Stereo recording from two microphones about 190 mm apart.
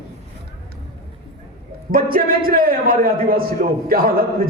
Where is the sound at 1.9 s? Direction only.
50° right (ahead or behind).